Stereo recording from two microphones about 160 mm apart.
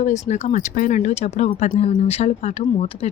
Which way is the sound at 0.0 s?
45° left (ahead or behind).